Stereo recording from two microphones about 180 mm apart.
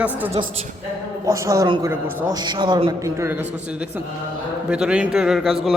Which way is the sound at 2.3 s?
25° right (ahead or behind).